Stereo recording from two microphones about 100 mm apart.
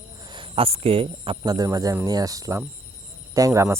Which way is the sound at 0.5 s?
70° right (ahead or behind).